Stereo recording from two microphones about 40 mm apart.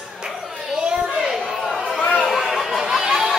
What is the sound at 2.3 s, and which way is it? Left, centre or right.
Chatter, centre.